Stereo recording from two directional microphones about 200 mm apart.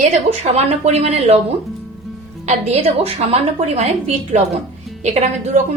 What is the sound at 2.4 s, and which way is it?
A woman's voice, 30° right (ahead or behind).